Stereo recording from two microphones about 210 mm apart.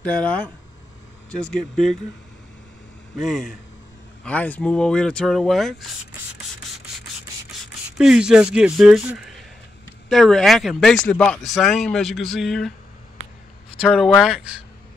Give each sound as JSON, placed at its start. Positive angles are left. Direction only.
{"t": 0.0, "sound": "speech", "side_deg": 5}
{"t": 1.5, "sound": "speech", "side_deg": 0}
{"t": 3.2, "sound": "speech", "side_deg": 0}
{"t": 8.0, "sound": "speech", "side_deg": -5}
{"t": 13.7, "sound": "speech", "side_deg": 0}